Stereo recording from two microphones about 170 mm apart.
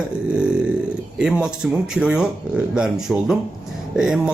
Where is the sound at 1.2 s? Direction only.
5° right (ahead or behind).